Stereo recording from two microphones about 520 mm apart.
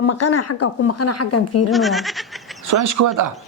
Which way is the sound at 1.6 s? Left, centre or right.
Centre.